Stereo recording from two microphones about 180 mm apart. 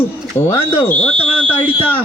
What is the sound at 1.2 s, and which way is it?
Speech, 10° left (ahead or behind).